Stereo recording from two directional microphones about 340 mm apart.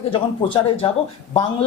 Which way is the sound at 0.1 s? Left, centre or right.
Centre.